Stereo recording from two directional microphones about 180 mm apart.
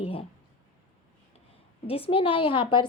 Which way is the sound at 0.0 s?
30° left (ahead or behind).